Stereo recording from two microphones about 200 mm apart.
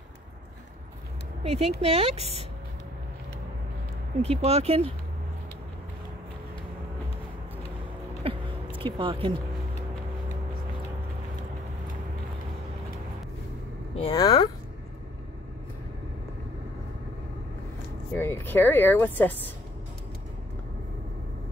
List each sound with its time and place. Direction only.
1.4 s speech: 30° right (ahead or behind)
4.2 s speech: 30° right (ahead or behind)
8.2 s a sound: 25° right (ahead or behind)
13.9 s speech: 25° left (ahead or behind)
18.1 s speech: 10° left (ahead or behind)